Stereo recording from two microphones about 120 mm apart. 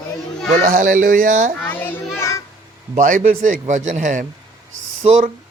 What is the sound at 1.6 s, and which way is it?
Children playing, 15° left (ahead or behind).